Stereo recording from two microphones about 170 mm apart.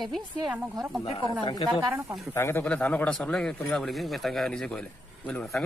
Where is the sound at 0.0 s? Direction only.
Centre (ahead or behind).